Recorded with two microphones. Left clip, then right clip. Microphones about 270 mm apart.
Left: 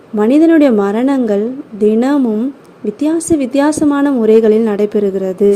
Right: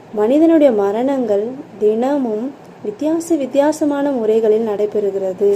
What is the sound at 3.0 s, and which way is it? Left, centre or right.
A woman's voice, left.